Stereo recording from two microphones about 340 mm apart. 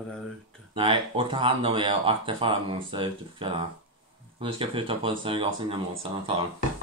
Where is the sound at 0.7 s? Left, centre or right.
Centre.